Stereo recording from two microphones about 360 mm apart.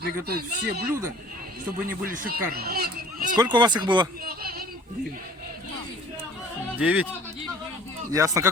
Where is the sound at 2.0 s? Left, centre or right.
Right.